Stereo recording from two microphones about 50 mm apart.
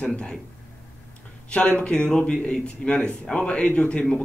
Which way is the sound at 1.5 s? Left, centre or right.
Left.